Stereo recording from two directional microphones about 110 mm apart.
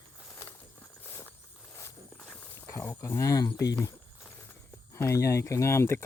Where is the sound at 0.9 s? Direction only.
20° left (ahead or behind).